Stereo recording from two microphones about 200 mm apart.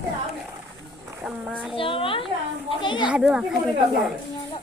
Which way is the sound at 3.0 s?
5° right (ahead or behind).